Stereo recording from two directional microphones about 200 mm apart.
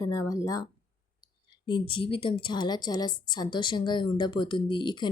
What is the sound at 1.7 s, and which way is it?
A woman's voice, 25° left (ahead or behind).